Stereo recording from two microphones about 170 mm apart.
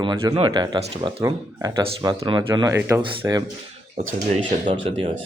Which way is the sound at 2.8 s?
15° right (ahead or behind).